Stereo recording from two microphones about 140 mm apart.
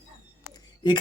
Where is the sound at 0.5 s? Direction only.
35° left (ahead or behind).